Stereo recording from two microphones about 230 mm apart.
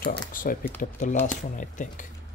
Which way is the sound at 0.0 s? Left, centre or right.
Left.